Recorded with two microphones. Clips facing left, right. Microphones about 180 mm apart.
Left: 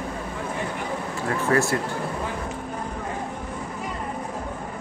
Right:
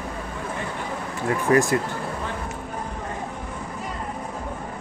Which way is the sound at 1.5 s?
15° right (ahead or behind).